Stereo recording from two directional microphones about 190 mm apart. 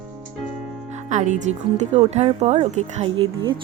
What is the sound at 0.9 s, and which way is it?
Music, 40° right (ahead or behind).